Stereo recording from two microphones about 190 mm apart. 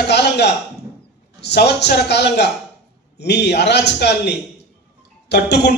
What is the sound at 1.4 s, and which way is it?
A man's voice, 65° left (ahead or behind).